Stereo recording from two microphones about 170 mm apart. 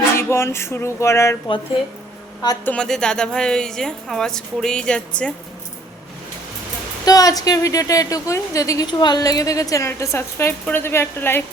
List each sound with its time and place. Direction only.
0.2 s a sound: 15° left (ahead or behind)
2.6 s a woman's voice: 5° left (ahead or behind)
7.0 s a woman's voice: 20° left (ahead or behind)